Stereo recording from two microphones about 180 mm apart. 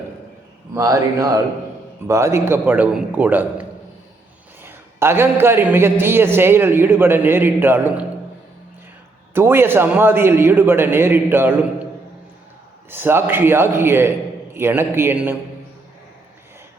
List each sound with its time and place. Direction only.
0.7 s a man's voice: 20° right (ahead or behind)
9.3 s a man's voice: 10° right (ahead or behind)
12.9 s a man's voice: 10° right (ahead or behind)